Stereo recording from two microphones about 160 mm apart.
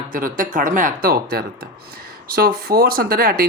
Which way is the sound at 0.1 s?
60° right (ahead or behind).